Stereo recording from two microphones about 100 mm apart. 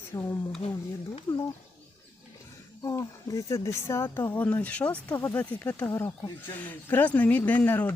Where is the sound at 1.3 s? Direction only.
45° left (ahead or behind).